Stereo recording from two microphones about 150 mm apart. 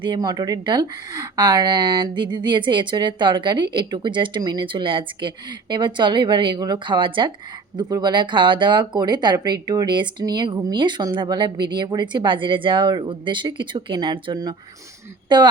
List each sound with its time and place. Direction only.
0.0 s speech: 30° right (ahead or behind)